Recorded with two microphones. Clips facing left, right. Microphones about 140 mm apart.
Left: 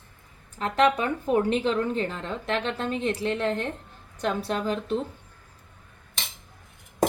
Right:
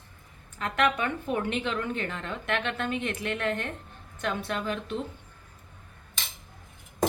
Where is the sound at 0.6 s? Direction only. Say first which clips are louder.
Left 4 dB; 30° left (ahead or behind).